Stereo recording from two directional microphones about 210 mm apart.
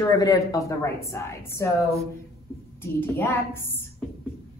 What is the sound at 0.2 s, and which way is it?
A woman's voice, 15° left (ahead or behind).